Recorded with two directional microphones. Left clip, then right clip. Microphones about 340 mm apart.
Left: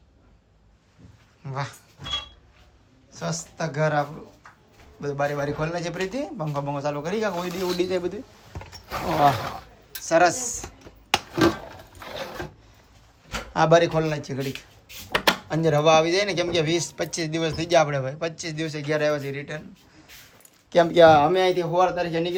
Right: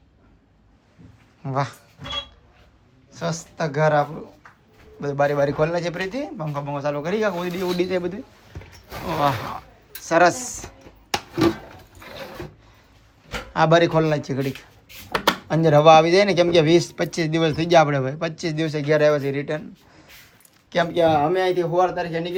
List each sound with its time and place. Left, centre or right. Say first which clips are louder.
1.5 s speech: right 7 dB; centre
3.1 s a man's voice: right 3 dB; centre
13.5 s speech: right 2 dB; centre
20.7 s speech: left 4 dB; centre
21.2 s speech: even; centre